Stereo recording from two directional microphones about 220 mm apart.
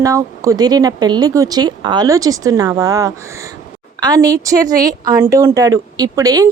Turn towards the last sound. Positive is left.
turn(degrees=-15)  # may be behind; listen again after turning